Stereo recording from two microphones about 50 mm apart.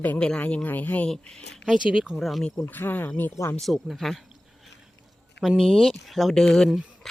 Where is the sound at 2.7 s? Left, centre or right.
Left.